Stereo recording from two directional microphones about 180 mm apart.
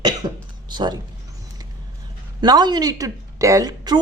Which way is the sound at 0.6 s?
25° right (ahead or behind).